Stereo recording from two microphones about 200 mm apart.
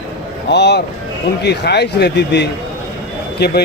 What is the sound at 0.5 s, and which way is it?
Speech, 55° left (ahead or behind).